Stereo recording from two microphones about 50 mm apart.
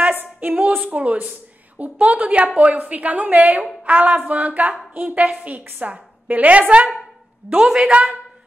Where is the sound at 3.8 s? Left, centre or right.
Right.